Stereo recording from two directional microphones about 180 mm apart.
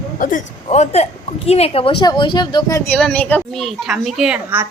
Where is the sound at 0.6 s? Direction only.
40° left (ahead or behind).